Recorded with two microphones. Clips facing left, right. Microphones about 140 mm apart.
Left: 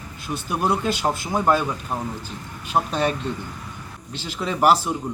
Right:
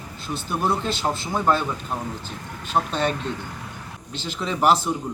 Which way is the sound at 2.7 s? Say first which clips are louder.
Left 1 dB; 10° left (ahead or behind).